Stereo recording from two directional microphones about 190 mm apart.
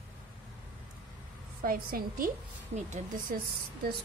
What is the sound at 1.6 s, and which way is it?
Speech, 45° right (ahead or behind).